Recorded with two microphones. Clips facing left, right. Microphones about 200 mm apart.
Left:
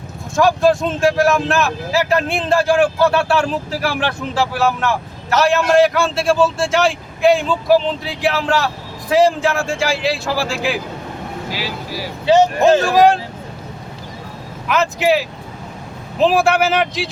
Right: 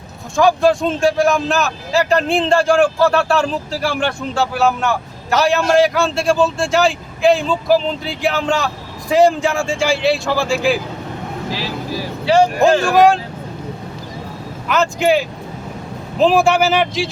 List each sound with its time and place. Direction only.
0.3 s a man's voice: centre (ahead or behind); by 12.8 s 20° left (ahead or behind)
14.7 s a man's voice: 5° left (ahead or behind)